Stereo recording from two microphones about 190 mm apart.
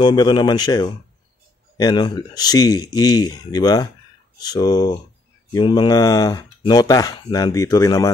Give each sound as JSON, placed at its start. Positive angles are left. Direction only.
{"t": 0.0, "sound": "speech", "side_deg": 20}